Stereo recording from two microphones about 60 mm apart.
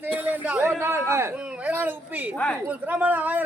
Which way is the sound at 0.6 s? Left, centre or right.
Right.